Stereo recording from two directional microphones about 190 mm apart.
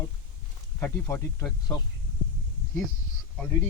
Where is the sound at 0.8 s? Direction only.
10° left (ahead or behind).